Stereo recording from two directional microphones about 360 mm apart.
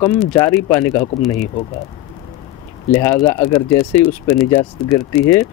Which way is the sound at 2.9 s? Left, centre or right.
Centre.